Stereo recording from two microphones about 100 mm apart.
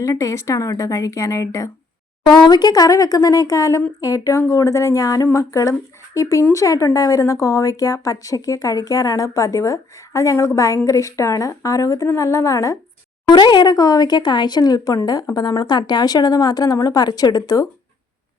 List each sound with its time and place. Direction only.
0.0 s speech: 30° left (ahead or behind)
2.2 s speech: 45° left (ahead or behind); by 12.7 s 30° left (ahead or behind)
13.3 s speech: 50° left (ahead or behind)